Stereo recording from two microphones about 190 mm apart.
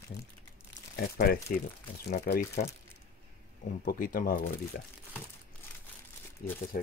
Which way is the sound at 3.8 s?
50° left (ahead or behind).